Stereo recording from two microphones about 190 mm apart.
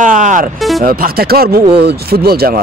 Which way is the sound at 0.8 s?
50° right (ahead or behind).